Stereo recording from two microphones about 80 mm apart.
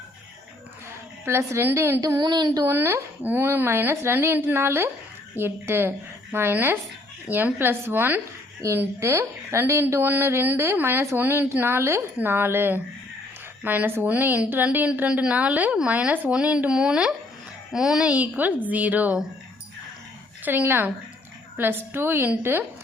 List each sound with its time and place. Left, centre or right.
1.2 s a woman's voice: right
2.0 s speech: right
2.6 s a woman's voice: right
20.4 s speech: right